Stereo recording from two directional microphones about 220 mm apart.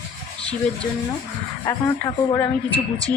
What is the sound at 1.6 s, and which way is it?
Speech, 15° left (ahead or behind).